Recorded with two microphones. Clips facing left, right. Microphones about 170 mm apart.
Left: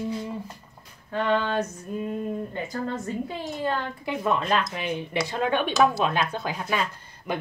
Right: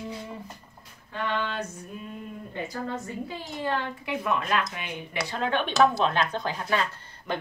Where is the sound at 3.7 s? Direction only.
30° left (ahead or behind); by 7.3 s 10° left (ahead or behind).